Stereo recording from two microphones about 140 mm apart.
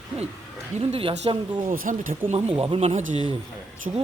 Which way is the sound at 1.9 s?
65° right (ahead or behind).